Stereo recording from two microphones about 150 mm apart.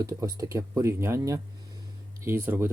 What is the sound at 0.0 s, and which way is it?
Speech, 20° right (ahead or behind).